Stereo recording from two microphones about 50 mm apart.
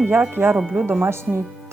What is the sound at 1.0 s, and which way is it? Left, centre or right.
Speech, right.